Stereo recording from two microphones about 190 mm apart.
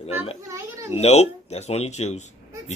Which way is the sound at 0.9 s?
35° left (ahead or behind).